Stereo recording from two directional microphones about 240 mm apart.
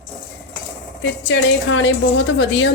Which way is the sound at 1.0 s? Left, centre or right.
Left.